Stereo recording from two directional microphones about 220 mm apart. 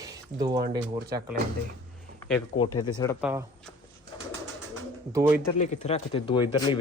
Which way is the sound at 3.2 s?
10° right (ahead or behind).